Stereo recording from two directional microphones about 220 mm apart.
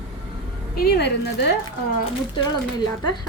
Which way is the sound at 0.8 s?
50° left (ahead or behind).